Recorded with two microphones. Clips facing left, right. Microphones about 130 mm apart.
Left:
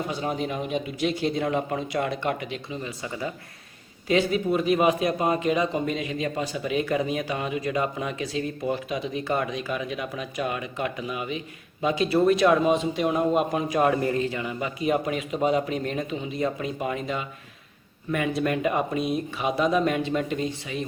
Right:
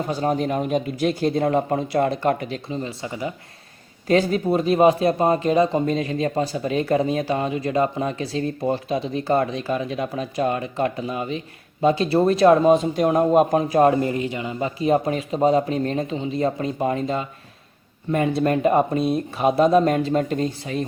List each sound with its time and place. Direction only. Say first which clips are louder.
0.1 s speech: right 6 dB; 40° right (ahead or behind); by 3.3 s 20° right (ahead or behind)
4.1 s speech: right 4 dB; 40° right (ahead or behind)